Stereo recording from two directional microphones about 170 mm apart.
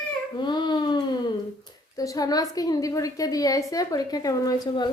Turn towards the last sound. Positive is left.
turn(degrees=20)  # may be behind; listen again after turning